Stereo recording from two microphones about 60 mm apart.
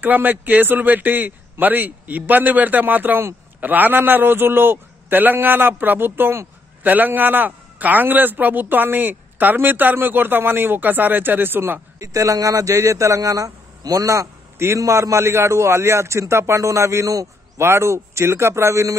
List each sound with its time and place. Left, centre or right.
0.0 s a man's voice: right
12.0 s a man's voice: right
17.6 s speech: right